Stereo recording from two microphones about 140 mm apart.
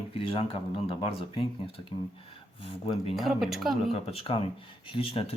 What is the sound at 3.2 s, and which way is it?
Speech, centre (ahead or behind).